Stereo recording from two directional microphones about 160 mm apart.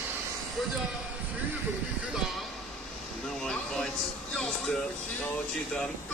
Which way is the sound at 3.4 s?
5° left (ahead or behind).